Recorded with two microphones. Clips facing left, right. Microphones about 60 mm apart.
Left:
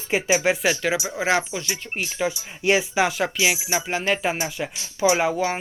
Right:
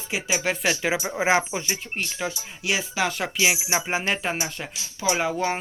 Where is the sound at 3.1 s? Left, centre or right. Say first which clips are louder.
Left 2 dB; centre.